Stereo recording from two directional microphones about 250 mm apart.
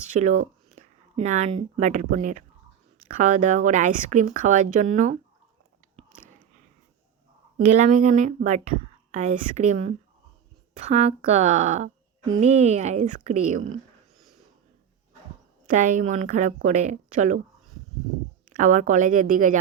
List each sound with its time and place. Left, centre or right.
0.1 s speech: right
7.7 s speech: right
15.6 s speech: right
18.4 s speech: right